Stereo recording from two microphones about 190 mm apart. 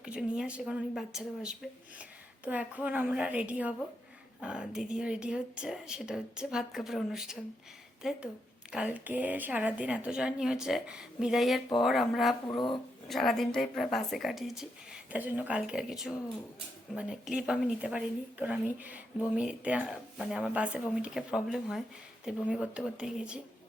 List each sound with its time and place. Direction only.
0.0 s a woman's voice: 5° right (ahead or behind)
12.5 s speech: 25° left (ahead or behind)
13.1 s speech: centre (ahead or behind)